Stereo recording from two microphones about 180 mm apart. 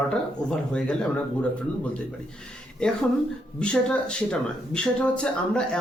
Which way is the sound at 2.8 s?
5° left (ahead or behind).